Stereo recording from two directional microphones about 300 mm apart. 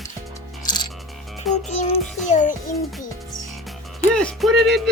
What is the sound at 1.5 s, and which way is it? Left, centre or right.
Music, centre.